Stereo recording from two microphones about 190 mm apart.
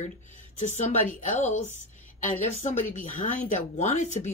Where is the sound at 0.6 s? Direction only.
40° left (ahead or behind).